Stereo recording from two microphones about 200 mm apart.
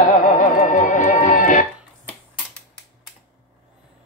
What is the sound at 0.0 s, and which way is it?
Music, 40° left (ahead or behind).